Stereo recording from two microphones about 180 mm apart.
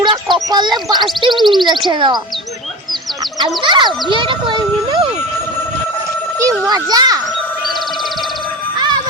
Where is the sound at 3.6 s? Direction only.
25° right (ahead or behind).